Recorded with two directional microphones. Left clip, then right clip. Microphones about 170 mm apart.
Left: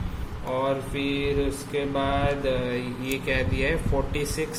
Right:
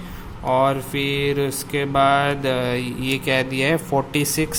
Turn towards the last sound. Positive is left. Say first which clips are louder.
# right 6 dB
turn(degrees=-40)  # may be behind; listen again after turning